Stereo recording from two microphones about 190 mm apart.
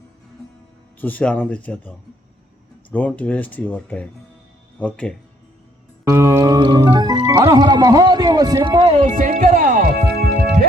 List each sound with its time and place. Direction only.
0.9 s speech: 10° left (ahead or behind)
6.1 s music: 15° right (ahead or behind)
9.0 s speech: 40° right (ahead or behind)